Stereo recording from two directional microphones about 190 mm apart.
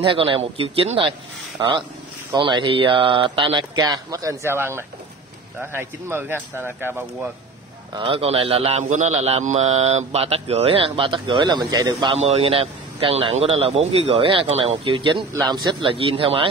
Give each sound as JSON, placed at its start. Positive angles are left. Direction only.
{"t": 0.0, "sound": "speech", "side_deg": -25}
{"t": 7.9, "sound": "a man's voice", "side_deg": -30}